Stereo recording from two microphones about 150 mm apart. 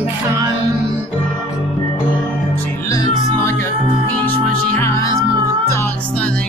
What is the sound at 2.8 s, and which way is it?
Music, 20° left (ahead or behind).